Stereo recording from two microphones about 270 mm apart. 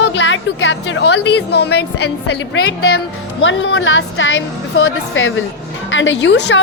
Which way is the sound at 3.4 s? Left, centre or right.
Left.